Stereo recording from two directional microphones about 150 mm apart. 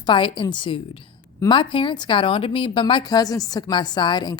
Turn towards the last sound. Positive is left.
turn(degrees=30)  # may be behind; listen again after turning